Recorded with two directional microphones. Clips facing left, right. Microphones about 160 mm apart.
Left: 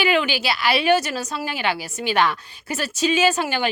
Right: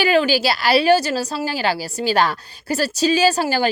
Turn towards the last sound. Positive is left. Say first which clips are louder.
# right 3 dB
turn(degrees=-35)  # may be behind; listen again after turning